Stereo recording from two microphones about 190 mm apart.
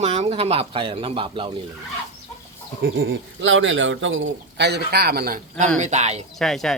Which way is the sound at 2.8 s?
80° right.